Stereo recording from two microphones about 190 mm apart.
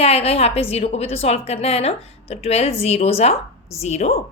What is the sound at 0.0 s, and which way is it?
A woman's voice, 35° left (ahead or behind).